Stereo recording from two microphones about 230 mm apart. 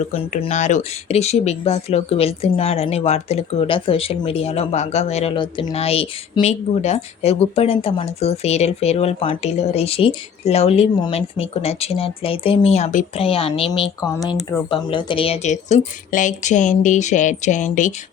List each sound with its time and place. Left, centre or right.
0.1 s speech: left